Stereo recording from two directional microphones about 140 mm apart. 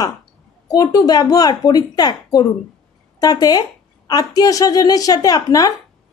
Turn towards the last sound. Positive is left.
turn(degrees=25)  # may be behind; listen again after turning